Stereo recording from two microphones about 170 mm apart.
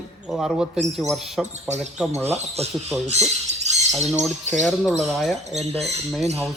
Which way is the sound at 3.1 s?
40° right (ahead or behind).